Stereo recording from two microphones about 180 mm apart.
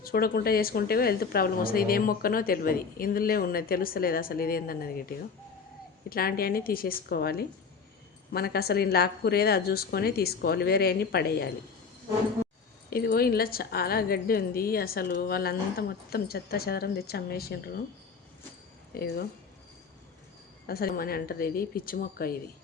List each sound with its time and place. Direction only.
0.0 s speech: 55° left (ahead or behind)
12.9 s speech: 55° left (ahead or behind)
18.9 s speech: 60° left (ahead or behind)
20.7 s speech: 55° left (ahead or behind)